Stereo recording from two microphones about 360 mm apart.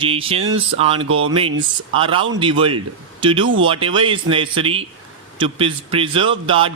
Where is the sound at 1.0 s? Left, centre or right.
Right.